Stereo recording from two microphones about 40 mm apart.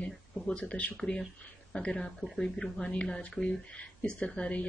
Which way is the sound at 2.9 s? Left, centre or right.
Left.